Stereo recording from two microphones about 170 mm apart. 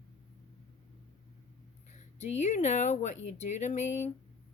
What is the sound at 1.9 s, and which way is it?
Speech, 45° left (ahead or behind).